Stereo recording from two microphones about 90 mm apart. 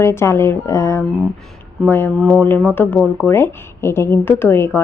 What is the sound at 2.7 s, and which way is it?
A woman's voice, 20° left (ahead or behind).